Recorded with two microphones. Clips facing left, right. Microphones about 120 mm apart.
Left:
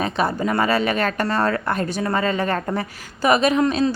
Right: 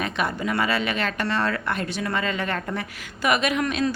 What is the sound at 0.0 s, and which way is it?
A woman's voice, 35° left (ahead or behind).